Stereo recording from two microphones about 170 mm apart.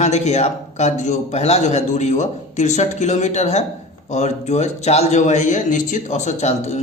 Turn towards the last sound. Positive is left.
turn(degrees=40)  # may be behind; listen again after turning